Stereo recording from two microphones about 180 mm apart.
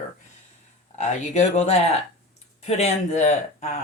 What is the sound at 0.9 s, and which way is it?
Speech, 40° left (ahead or behind).